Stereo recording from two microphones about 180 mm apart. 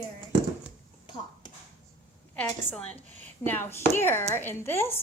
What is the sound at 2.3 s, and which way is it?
Speech, 5° left (ahead or behind).